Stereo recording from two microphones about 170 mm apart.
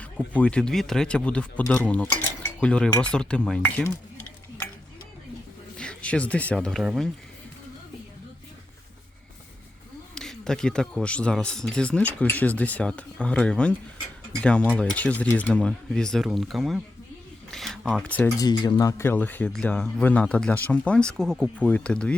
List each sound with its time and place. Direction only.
0.0 s speech: 10° left (ahead or behind)
5.7 s speech: 5° left (ahead or behind)
10.2 s speech: 5° left (ahead or behind)
17.5 s a sound: centre (ahead or behind)
18.3 s speech: 25° left (ahead or behind); by 22.1 s 5° left (ahead or behind)